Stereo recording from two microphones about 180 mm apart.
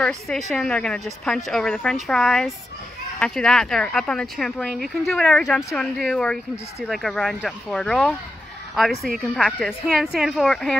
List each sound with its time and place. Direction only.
0.0 s speech: 5° left (ahead or behind)
9.2 s speech: 5° left (ahead or behind)